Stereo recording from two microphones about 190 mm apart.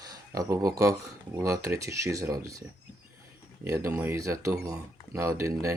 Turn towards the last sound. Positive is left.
turn(degrees=-15)  # may be behind; listen again after turning